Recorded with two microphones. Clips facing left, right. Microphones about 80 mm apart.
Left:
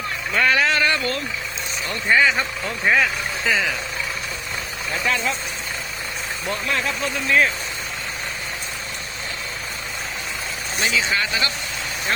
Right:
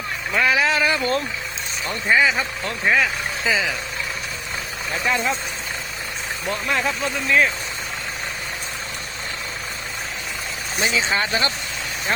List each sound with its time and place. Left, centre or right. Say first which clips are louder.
0.3 s speech: even; centre
5.0 s speech: right 1 dB; centre
6.7 s speech: right 2 dB; centre
7.0 s speech: left 2 dB; centre
10.8 s speech: right 1 dB; right